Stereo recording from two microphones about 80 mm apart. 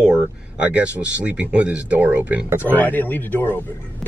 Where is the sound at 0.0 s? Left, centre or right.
Centre.